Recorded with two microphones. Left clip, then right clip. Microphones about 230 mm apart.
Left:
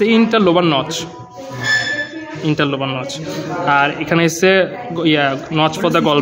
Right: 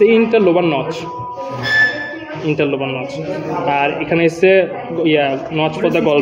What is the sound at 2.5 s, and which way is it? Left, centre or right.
A man's voice, left.